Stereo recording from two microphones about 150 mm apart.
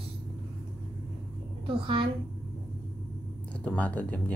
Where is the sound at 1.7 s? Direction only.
35° right (ahead or behind).